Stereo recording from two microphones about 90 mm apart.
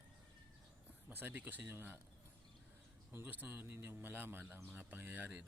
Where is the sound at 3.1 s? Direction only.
20° right (ahead or behind).